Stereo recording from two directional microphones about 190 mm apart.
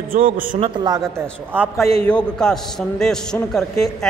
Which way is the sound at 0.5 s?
25° right (ahead or behind).